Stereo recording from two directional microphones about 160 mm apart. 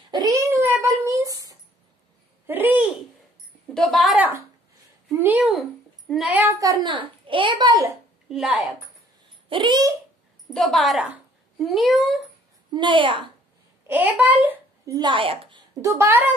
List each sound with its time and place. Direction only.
0.1 s a sound: 20° right (ahead or behind)
2.4 s babbling: 10° right (ahead or behind)
3.7 s a sound: centre (ahead or behind)
5.1 s a child's voice: 10° right (ahead or behind)
6.4 s a child's voice: 20° right (ahead or behind)
8.3 s a child's voice: 5° right (ahead or behind)
9.5 s a child's voice: 30° right (ahead or behind)
10.5 s a child's voice: centre (ahead or behind)
12.7 s a woman's voice: 30° right (ahead or behind)
13.8 s a child's voice: 10° right (ahead or behind)
14.9 s a woman's voice: 30° right (ahead or behind)
15.8 s a child's voice: 15° right (ahead or behind)